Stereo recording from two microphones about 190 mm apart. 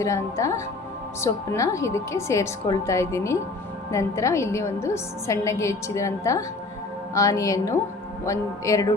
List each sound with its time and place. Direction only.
0.0 s a woman's voice: 15° left (ahead or behind)